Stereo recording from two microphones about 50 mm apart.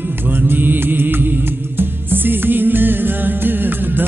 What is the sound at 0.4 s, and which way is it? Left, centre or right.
Music, right.